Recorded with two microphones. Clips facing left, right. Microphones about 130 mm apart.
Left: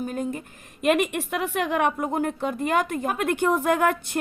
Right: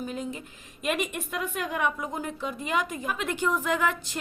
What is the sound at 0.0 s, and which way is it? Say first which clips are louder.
A woman's voice: left 5 dB; 50° left (ahead or behind).